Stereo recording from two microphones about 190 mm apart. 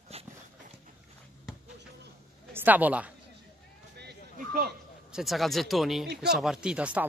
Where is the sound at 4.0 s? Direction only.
55° right (ahead or behind).